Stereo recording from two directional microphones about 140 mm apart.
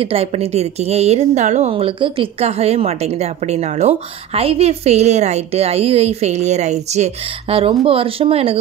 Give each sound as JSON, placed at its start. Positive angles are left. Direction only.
{"t": 0.0, "sound": "a woman's voice", "side_deg": -45}
{"t": 1.7, "sound": "a woman's voice", "side_deg": -40}